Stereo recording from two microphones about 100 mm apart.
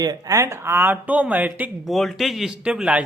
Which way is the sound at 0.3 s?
25° right (ahead or behind).